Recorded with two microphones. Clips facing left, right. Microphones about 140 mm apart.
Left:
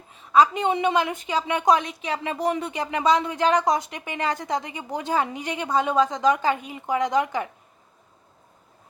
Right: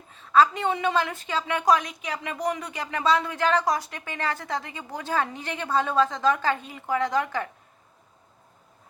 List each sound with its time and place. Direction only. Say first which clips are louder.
0.1 s a woman's voice: left 1 dB; 15° left (ahead or behind)